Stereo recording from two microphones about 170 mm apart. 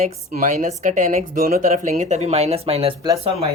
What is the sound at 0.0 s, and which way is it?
A woman's voice, 50° right (ahead or behind).